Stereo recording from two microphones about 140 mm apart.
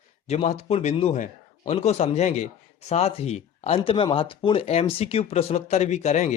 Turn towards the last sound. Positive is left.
turn(degrees=55)  # may be behind; listen again after turning